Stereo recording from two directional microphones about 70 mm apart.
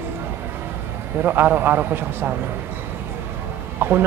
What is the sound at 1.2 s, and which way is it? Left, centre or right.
Speech, right.